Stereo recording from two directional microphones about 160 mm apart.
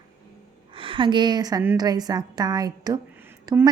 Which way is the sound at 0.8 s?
30° right (ahead or behind).